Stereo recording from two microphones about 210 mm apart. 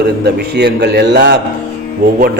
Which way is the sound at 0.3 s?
55° right (ahead or behind).